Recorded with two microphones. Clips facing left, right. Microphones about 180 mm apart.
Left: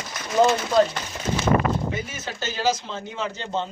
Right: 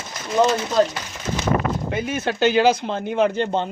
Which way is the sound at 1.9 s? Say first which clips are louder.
Right 7 dB; 60° right (ahead or behind).